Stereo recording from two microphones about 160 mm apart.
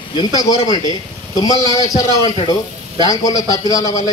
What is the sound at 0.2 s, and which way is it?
A man's voice, 25° left (ahead or behind).